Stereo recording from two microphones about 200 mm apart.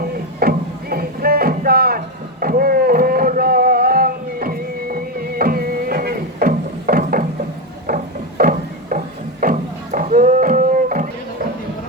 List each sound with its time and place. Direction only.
0.3 s music: 50° right (ahead or behind)
2.4 s a sound: 45° right (ahead or behind)
9.4 s music: 40° right (ahead or behind)